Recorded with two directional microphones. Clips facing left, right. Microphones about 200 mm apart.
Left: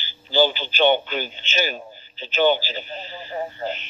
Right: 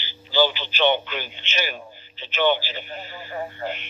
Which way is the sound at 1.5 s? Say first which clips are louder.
Left 4 dB; 25° left (ahead or behind).